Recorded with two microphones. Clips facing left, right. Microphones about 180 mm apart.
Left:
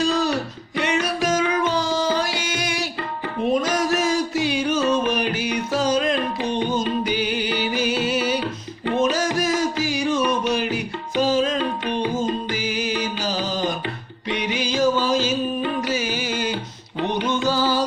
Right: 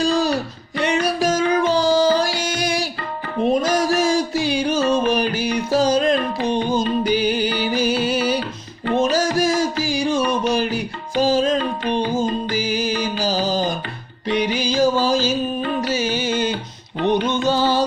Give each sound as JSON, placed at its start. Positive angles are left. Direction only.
{"t": 0.0, "sound": "music", "side_deg": -35}